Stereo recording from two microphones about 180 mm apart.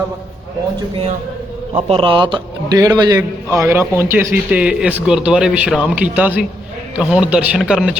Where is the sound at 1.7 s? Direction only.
30° right (ahead or behind).